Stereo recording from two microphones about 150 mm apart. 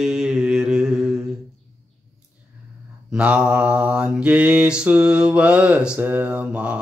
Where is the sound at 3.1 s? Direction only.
10° right (ahead or behind).